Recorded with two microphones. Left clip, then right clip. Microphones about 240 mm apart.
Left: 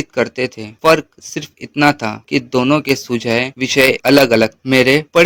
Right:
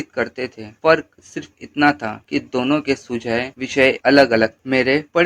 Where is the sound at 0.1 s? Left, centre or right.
Left.